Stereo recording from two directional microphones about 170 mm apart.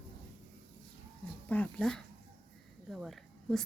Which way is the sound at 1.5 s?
5° left (ahead or behind).